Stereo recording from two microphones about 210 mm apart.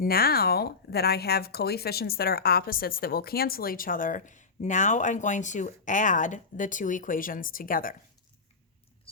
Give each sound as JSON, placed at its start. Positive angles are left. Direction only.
{"t": 0.0, "sound": "speech", "side_deg": 45}